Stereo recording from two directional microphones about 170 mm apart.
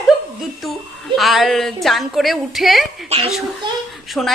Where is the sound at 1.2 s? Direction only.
Centre (ahead or behind).